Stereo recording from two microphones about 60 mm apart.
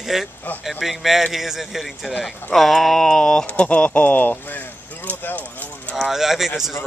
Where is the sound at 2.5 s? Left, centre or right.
Centre.